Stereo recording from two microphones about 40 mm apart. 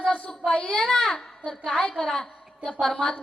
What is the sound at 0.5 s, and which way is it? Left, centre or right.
A child's voice, left.